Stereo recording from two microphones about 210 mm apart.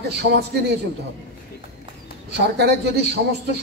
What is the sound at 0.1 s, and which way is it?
Speech, 50° right (ahead or behind).